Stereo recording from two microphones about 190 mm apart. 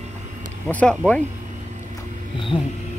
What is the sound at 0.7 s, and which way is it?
Speech, 5° left (ahead or behind).